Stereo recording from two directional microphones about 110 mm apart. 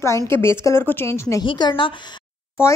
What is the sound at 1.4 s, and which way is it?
Speech, 45° left (ahead or behind).